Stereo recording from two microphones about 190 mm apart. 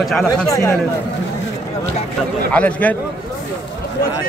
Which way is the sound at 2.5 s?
5° left (ahead or behind).